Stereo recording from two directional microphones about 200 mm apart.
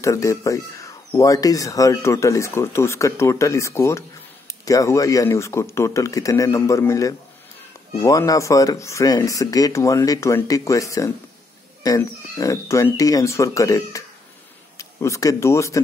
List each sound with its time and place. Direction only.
0.0 s speech: 15° left (ahead or behind)